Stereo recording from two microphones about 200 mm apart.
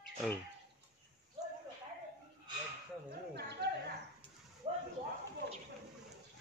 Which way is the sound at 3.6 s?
60° right (ahead or behind).